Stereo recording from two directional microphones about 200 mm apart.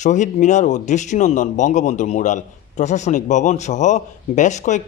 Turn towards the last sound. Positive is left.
turn(degrees=35)  # may be behind; listen again after turning